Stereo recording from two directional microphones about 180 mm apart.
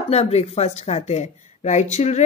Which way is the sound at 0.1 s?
35° left (ahead or behind).